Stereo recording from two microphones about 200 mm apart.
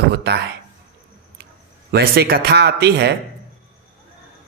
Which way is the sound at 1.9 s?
50° right (ahead or behind).